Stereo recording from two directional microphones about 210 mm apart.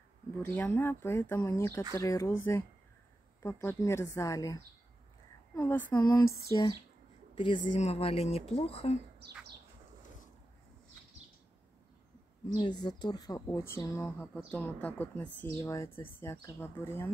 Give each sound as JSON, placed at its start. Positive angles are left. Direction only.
{"t": 0.4, "sound": "a woman's voice", "side_deg": 5}
{"t": 3.4, "sound": "a woman's voice", "side_deg": 15}
{"t": 12.5, "sound": "a woman's voice", "side_deg": 20}